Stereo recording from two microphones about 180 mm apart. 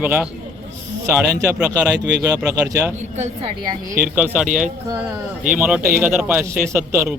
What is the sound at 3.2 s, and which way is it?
Speech, 25° right (ahead or behind).